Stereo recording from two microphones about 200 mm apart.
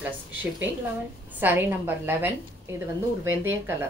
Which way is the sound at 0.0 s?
10° right (ahead or behind).